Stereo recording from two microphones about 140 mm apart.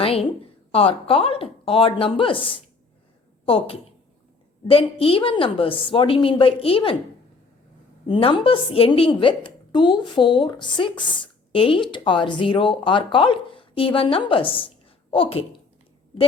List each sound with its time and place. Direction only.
0.0 s a sound: 45° left (ahead or behind)
0.7 s a woman's voice: 40° left (ahead or behind)
8.0 s a woman's voice: 35° left (ahead or behind)